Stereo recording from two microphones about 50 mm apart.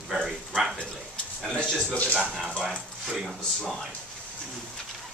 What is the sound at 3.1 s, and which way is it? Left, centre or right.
Speech, centre.